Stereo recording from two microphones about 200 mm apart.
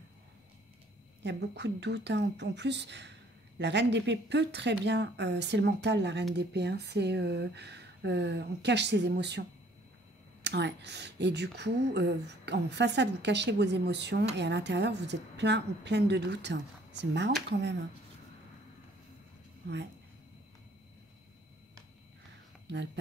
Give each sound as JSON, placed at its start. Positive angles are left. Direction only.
{"t": 1.2, "sound": "a woman's voice", "side_deg": -60}